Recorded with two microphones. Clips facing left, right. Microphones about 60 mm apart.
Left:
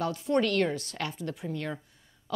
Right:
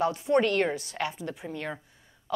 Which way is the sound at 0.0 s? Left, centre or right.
Right.